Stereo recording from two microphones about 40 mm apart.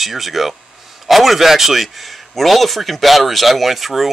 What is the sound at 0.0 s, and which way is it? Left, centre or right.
A man's voice, centre.